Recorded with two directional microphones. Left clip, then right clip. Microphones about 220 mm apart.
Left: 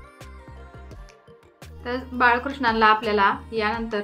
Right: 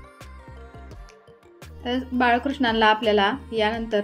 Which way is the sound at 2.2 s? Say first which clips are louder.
Left 2 dB; 35° right (ahead or behind).